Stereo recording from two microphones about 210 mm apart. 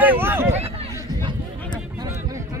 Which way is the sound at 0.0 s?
10° right (ahead or behind).